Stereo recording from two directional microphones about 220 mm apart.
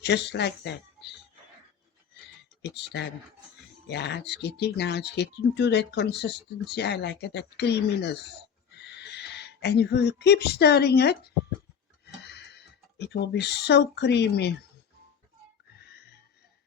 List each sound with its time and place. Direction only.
0.0 s speech: 50° left (ahead or behind)
2.6 s speech: 50° left (ahead or behind)